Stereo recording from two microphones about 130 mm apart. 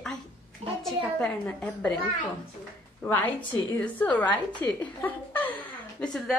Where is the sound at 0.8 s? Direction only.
5° left (ahead or behind).